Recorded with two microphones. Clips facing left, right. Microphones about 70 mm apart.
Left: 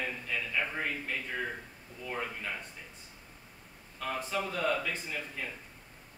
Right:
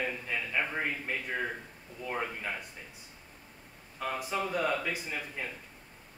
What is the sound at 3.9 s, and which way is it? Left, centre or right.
A man's voice, centre.